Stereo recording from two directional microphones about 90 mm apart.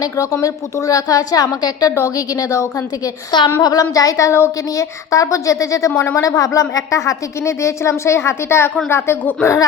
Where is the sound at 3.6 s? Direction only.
40° left (ahead or behind).